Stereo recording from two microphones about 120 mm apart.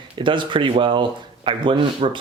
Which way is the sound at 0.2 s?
45° right (ahead or behind).